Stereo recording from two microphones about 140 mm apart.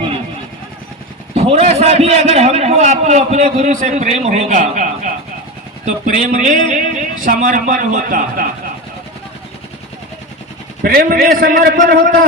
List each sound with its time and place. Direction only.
1.3 s a man's voice: 50° right (ahead or behind); by 8.4 s 75° right (ahead or behind)
10.8 s a man's voice: 90° right